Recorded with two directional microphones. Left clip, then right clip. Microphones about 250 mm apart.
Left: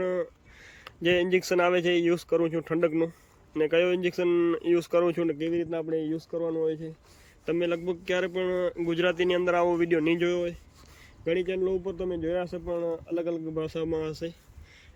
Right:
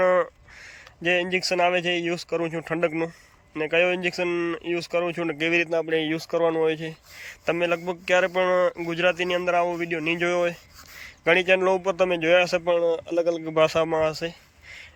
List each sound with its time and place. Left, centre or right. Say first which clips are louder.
0.0 s a sound: right 9 dB; centre
1.0 s speech: right 1 dB; centre
5.8 s a man's voice: right 5 dB; right
7.4 s speech: right 4 dB; centre
11.6 s a man's voice: right 8 dB; right
13.7 s speech: right 8 dB; centre